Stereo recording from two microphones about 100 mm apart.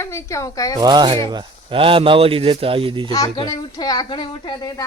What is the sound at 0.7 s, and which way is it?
A man's voice, 45° right (ahead or behind).